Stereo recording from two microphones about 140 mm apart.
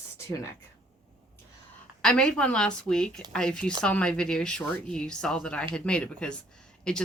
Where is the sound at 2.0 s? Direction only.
5° left (ahead or behind).